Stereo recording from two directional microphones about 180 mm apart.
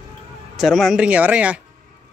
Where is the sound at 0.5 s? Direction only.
Centre (ahead or behind).